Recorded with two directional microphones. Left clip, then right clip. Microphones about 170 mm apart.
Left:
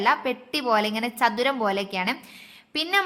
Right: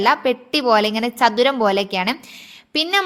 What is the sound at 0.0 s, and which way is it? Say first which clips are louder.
A woman's voice: right 6 dB; 30° right (ahead or behind).